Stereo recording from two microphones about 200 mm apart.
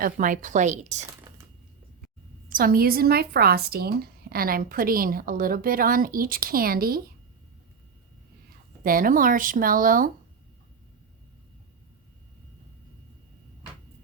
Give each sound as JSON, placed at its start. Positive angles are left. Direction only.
{"t": 0.0, "sound": "speech", "side_deg": -40}
{"t": 1.3, "sound": "a sound", "side_deg": -20}
{"t": 2.5, "sound": "a woman's voice", "side_deg": -45}
{"t": 8.8, "sound": "a woman's voice", "side_deg": -45}